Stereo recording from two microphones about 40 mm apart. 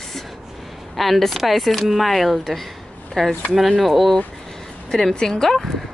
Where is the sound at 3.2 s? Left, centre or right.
Centre.